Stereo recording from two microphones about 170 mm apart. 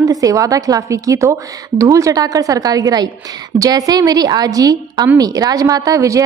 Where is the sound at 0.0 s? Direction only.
20° right (ahead or behind).